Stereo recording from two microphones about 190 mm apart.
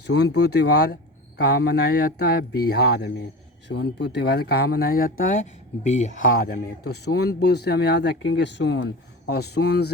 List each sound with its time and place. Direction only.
0.1 s speech: 65° left (ahead or behind)